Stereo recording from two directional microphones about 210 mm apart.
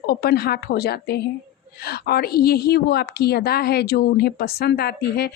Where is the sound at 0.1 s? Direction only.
45° left (ahead or behind).